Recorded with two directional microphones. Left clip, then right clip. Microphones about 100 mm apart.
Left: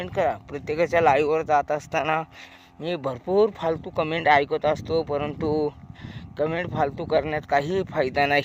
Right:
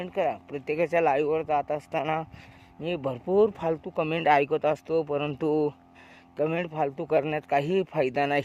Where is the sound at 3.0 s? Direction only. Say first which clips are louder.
Left 2 dB; 40° right (ahead or behind).